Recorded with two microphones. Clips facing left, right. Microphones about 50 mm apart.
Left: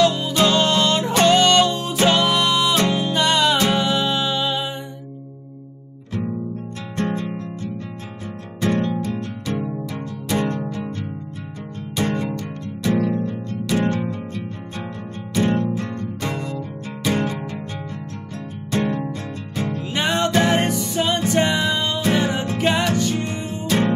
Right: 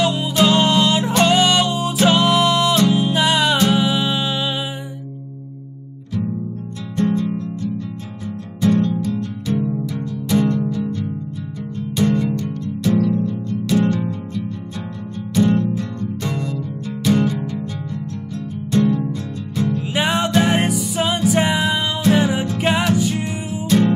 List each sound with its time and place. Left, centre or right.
0.0 s music: centre
8.5 s music: left
9.6 s music: left
10.3 s music: left
15.4 s music: left
16.2 s music: left
17.1 s music: left
18.7 s music: left
19.9 s music: centre